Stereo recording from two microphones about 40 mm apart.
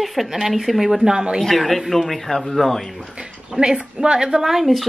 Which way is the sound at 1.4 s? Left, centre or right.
Centre.